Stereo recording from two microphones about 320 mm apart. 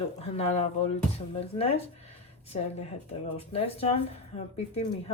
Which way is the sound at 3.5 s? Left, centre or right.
Centre.